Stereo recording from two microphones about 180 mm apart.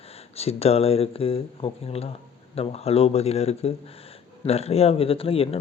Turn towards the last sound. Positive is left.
turn(degrees=35)  # may be behind; listen again after turning